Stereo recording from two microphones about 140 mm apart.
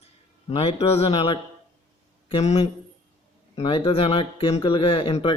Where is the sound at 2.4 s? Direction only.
50° left (ahead or behind).